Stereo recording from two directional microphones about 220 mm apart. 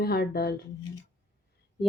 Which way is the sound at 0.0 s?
45° left (ahead or behind).